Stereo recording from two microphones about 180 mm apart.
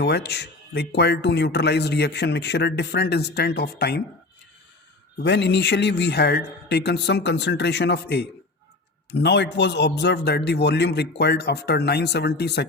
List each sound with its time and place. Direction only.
0.0 s speech: 65° left (ahead or behind)
5.2 s speech: 70° left (ahead or behind)